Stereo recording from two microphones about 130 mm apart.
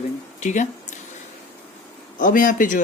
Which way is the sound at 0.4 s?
65° left (ahead or behind).